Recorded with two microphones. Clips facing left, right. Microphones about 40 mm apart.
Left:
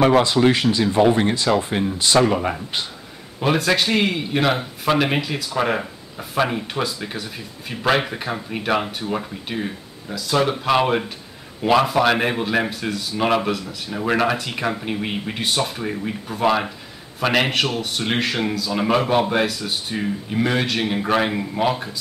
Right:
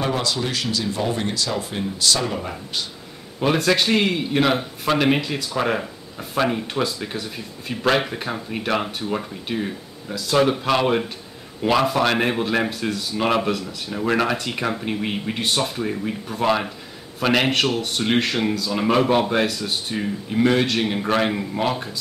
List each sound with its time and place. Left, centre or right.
0.5 s speech: left
2.1 s speech: left
3.3 s a man's voice: centre